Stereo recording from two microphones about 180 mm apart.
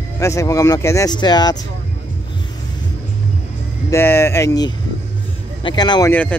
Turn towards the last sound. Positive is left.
turn(degrees=10)  # may be behind; listen again after turning